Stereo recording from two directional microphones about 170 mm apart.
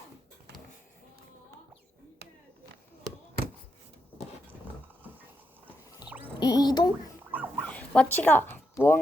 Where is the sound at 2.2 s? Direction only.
70° right (ahead or behind).